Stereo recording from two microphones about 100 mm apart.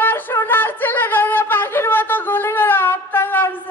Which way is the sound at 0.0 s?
20° left (ahead or behind).